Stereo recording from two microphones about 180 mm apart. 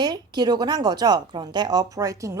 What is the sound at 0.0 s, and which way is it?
A woman's voice, 25° right (ahead or behind).